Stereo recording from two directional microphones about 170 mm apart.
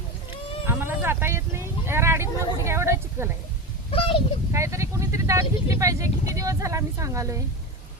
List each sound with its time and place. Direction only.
0.6 s speech: 15° right (ahead or behind)
3.9 s a child's voice: 30° left (ahead or behind)
4.5 s speech: 15° right (ahead or behind)